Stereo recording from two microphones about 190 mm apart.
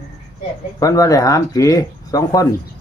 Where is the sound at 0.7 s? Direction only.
20° left (ahead or behind).